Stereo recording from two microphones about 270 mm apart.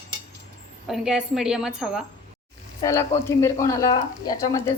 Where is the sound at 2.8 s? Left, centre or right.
Centre.